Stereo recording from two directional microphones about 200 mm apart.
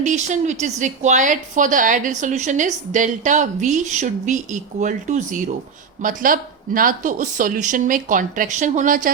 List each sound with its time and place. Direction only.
0.0 s a woman's voice: 35° right (ahead or behind)